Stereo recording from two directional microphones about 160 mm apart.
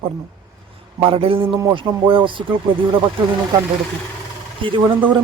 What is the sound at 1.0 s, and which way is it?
Speech, 35° right (ahead or behind).